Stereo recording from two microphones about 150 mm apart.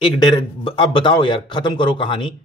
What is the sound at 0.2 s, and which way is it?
Speech, 30° left (ahead or behind).